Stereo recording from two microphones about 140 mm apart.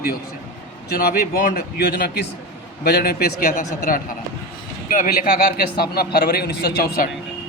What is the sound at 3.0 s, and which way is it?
Speech, 90° left.